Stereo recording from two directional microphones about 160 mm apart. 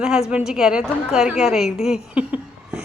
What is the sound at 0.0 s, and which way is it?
Speech, 5° right (ahead or behind).